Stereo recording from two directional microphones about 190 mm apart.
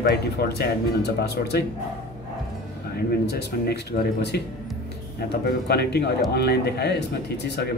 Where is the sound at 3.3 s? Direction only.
60° left (ahead or behind).